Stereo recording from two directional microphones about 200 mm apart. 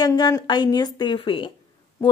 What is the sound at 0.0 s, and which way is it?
Speech, 20° left (ahead or behind).